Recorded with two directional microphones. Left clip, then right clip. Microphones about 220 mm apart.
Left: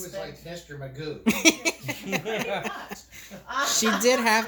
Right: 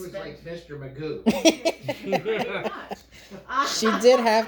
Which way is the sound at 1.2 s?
25° left (ahead or behind).